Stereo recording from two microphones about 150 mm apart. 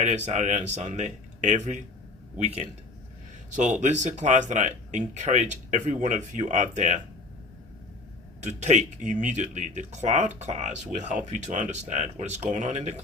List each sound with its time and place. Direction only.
0.3 s speech: 50° right (ahead or behind)
8.4 s speech: 50° right (ahead or behind)